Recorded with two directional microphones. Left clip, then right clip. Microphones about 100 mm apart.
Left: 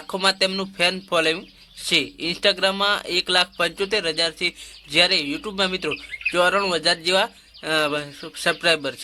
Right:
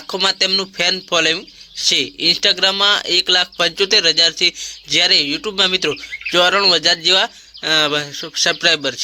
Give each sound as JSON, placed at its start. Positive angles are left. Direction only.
{"t": 0.1, "sound": "speech", "side_deg": -15}